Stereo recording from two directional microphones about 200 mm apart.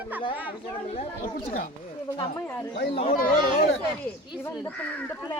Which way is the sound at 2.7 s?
55° left (ahead or behind).